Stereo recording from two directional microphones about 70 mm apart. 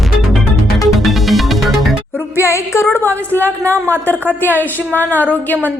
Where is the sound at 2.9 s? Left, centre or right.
Left.